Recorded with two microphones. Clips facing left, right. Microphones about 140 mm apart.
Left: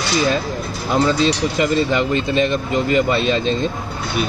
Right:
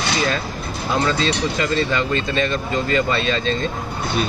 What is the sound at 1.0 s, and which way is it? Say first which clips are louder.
Speech: left 5 dB; 10° left (ahead or behind).